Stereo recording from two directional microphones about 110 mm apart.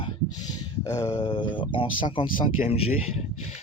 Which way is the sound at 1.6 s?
50° left (ahead or behind).